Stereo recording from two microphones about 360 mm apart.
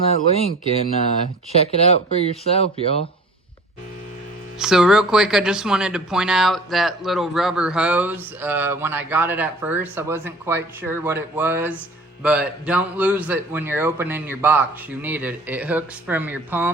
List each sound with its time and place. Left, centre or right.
0.1 s speech: centre
1.5 s speech: centre
4.6 s speech: centre